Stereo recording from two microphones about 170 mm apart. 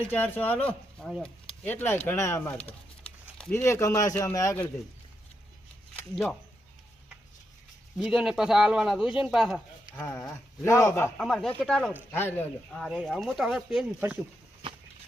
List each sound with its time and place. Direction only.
0.1 s speech: 10° left (ahead or behind)
1.6 s speech: 10° left (ahead or behind)
2.6 s a sound: 5° left (ahead or behind)
3.5 s speech: 15° left (ahead or behind)
6.0 s speech: 10° left (ahead or behind)
7.9 s speech: 5° right (ahead or behind)
9.9 s speech: 10° left (ahead or behind)
11.2 s speech: 5° left (ahead or behind)